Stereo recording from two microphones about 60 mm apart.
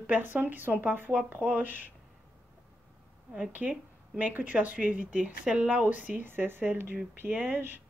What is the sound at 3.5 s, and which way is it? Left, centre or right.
Speech, right.